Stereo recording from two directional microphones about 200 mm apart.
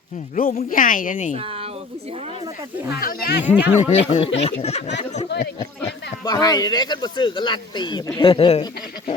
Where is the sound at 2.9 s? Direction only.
50° left (ahead or behind).